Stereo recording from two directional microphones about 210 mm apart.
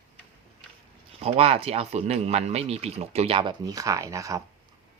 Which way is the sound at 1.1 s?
30° right (ahead or behind).